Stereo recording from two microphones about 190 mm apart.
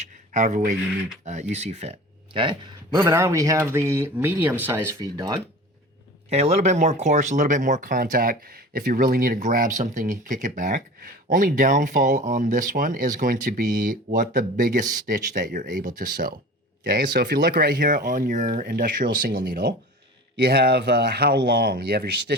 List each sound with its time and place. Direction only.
0.3 s speech: 45° right (ahead or behind); by 5.4 s 20° right (ahead or behind)
6.3 s speech: 35° right (ahead or behind)
13.7 s speech: 60° right (ahead or behind)
14.2 s speech: 45° right (ahead or behind)
16.8 s speech: 60° right (ahead or behind)
19.5 s speech: 60° right (ahead or behind)